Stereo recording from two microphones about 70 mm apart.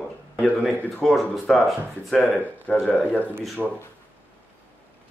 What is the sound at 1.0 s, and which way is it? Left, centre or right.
Speech, centre.